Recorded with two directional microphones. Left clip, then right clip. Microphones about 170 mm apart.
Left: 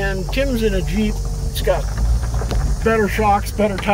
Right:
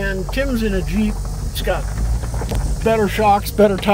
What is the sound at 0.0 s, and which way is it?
Speech, 5° right (ahead or behind).